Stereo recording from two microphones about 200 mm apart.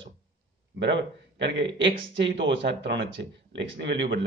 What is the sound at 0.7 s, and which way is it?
A man's voice, 65° right (ahead or behind).